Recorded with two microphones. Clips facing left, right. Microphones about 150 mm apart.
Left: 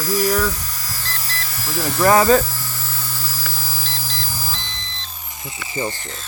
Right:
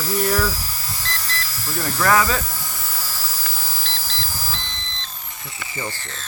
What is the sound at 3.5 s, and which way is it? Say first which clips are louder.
Beep: left 2 dB; 5° left (ahead or behind).